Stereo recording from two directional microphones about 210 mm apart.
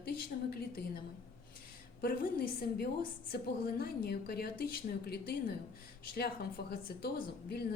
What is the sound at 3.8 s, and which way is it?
Speech, 45° left (ahead or behind).